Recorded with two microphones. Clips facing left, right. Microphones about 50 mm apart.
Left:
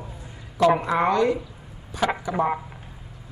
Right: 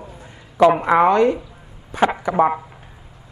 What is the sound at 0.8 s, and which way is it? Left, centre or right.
Speech, right.